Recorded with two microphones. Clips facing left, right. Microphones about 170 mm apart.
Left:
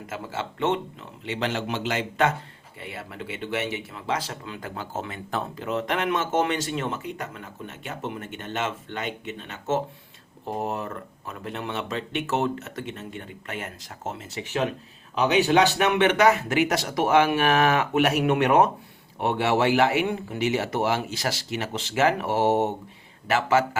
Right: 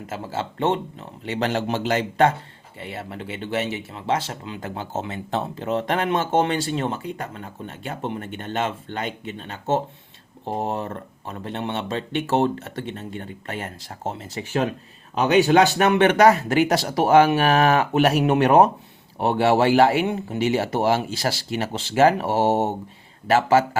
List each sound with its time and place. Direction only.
0.1 s speech: 30° right (ahead or behind)
15.2 s speech: 50° right (ahead or behind); by 23.6 s 35° right (ahead or behind)